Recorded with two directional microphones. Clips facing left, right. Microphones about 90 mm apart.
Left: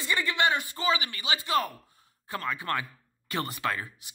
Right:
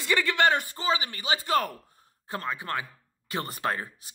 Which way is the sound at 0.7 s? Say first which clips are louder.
Even; 35° right (ahead or behind).